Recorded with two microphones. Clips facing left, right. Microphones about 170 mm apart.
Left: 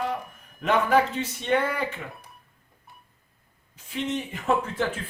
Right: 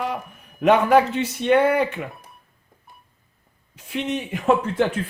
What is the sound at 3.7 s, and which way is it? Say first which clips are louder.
Speech: right 3 dB; 70° right (ahead or behind).